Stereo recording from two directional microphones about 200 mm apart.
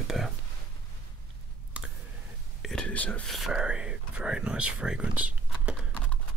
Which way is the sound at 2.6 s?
5° left (ahead or behind).